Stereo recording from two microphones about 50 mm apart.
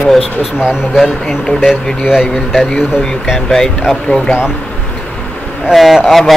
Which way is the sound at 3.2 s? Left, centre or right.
Centre.